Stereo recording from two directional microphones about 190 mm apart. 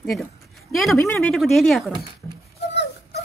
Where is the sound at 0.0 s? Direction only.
Centre (ahead or behind).